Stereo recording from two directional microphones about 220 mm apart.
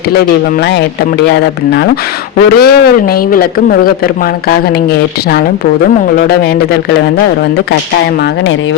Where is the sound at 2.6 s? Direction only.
45° left (ahead or behind).